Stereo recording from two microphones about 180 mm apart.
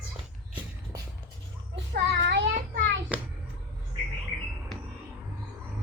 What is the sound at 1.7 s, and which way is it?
Child singing, 75° right (ahead or behind).